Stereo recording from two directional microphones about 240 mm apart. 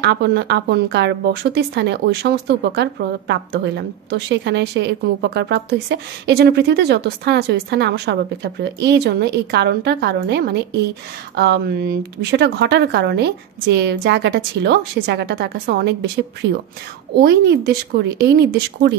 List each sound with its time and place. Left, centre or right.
0.0 s a woman's voice: right